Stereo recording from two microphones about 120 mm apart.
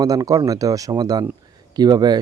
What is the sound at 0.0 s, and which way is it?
Speech, 30° right (ahead or behind).